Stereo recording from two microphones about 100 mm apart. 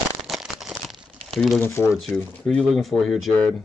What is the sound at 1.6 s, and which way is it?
Speech, 25° left (ahead or behind).